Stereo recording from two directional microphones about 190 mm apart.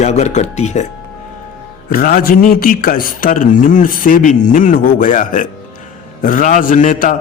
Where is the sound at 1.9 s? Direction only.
50° left (ahead or behind).